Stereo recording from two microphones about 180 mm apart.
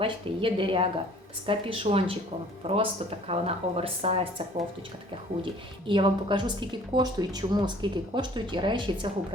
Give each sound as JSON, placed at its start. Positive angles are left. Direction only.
{"t": 0.0, "sound": "speech", "side_deg": -30}
{"t": 5.9, "sound": "speech", "side_deg": -25}